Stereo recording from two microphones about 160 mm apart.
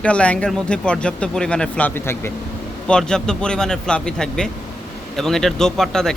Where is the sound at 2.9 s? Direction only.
5° left (ahead or behind).